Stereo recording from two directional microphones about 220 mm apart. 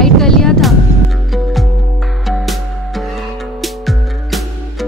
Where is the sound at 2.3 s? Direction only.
Centre (ahead or behind).